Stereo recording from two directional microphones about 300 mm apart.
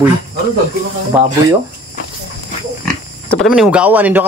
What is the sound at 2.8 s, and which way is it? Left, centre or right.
Pig, centre.